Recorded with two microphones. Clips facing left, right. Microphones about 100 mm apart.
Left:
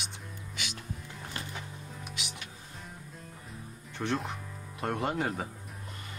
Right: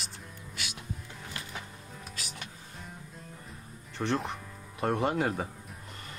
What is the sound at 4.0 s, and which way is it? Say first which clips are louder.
Speech: right 2 dB; centre (ahead or behind).